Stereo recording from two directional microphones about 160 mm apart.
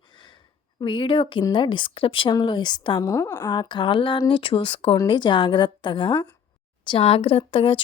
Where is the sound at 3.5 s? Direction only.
30° left (ahead or behind).